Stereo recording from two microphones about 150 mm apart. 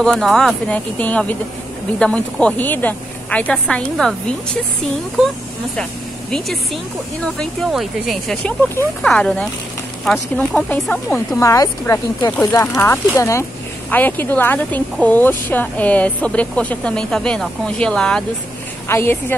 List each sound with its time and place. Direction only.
0.0 s speech: 5° left (ahead or behind)
6.3 s speech: centre (ahead or behind)
11.4 s speech: 20° left (ahead or behind); by 18.2 s 5° left (ahead or behind)
18.9 s speech: 15° left (ahead or behind)